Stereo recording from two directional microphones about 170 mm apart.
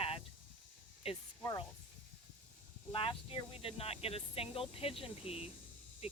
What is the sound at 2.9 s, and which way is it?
Speech, 30° left (ahead or behind).